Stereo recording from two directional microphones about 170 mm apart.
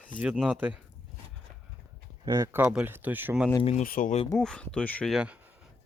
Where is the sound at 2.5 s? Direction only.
10° right (ahead or behind).